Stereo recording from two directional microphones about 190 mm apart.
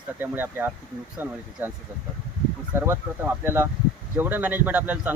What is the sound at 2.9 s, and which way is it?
Speech, 10° right (ahead or behind).